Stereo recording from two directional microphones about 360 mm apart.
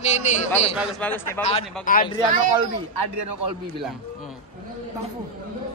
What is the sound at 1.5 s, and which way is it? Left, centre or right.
Speech, centre.